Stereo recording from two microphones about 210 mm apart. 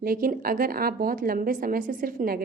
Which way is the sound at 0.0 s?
45° right (ahead or behind).